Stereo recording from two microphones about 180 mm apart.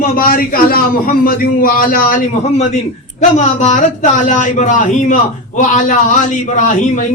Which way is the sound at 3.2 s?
40° left (ahead or behind).